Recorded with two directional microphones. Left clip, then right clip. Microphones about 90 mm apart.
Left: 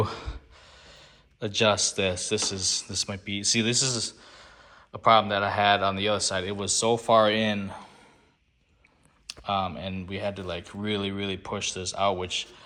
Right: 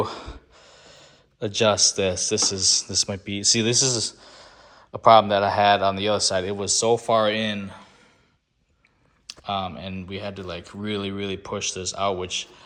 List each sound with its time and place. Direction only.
0.0 s speech: 50° right (ahead or behind); by 4.3 s 65° right (ahead or behind)
4.3 s a sound: 50° right (ahead or behind)
5.0 s speech: 60° right (ahead or behind); by 7.1 s 25° right (ahead or behind)
7.1 s speech: centre (ahead or behind)
9.2 s speech: 5° right (ahead or behind); by 12.6 s 30° right (ahead or behind)